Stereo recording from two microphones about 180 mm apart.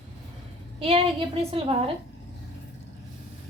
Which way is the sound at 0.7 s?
30° right (ahead or behind).